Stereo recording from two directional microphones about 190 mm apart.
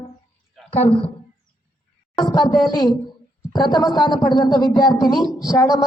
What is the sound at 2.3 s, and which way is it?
Speech, 20° left (ahead or behind).